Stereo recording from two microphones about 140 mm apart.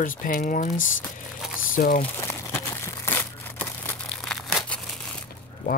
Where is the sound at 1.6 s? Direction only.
75° left (ahead or behind).